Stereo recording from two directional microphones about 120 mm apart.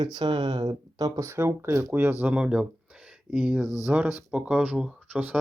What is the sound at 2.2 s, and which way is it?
Speech, 10° right (ahead or behind).